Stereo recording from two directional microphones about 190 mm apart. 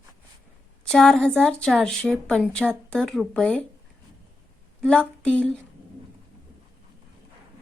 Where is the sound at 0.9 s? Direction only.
5° left (ahead or behind).